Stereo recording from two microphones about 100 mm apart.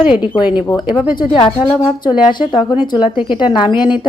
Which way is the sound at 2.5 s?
45° left (ahead or behind).